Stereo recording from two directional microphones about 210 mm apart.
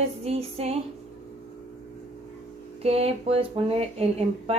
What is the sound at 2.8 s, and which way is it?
Speech, 30° right (ahead or behind).